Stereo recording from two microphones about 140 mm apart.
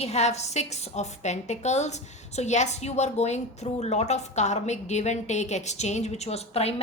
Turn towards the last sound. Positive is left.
turn(degrees=50)  # may be behind; listen again after turning